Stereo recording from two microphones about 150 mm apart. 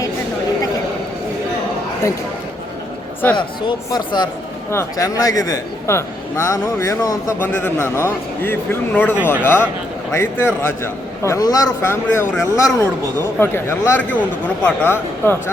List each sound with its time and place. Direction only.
3.3 s speech: 30° left (ahead or behind)
4.7 s a man's voice: 20° left (ahead or behind)